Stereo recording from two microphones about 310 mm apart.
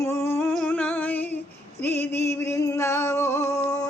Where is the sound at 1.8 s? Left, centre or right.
Centre.